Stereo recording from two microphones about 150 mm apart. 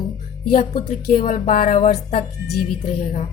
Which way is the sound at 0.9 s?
60° left (ahead or behind).